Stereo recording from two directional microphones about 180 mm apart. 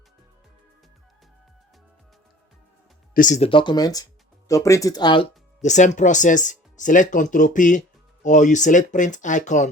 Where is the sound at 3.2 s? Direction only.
40° left (ahead or behind); by 5.3 s 25° left (ahead or behind).